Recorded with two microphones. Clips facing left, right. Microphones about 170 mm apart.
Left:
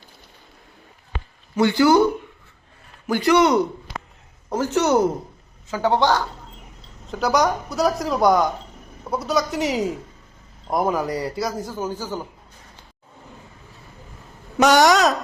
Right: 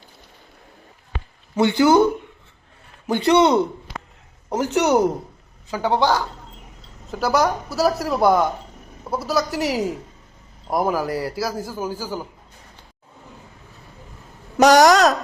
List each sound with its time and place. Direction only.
1.5 s speech: 20° right (ahead or behind)
3.1 s a woman's voice: 25° right (ahead or behind); by 12.3 s 10° right (ahead or behind)
14.8 s a man's voice: centre (ahead or behind)